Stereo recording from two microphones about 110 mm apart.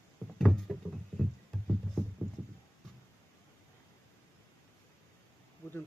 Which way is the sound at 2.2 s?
15° right (ahead or behind).